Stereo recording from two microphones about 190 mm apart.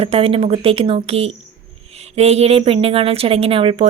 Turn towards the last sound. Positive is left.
turn(degrees=-30)  # may be behind; listen again after turning